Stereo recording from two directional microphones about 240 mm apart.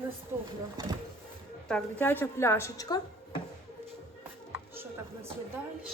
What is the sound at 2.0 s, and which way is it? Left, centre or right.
Speech, centre.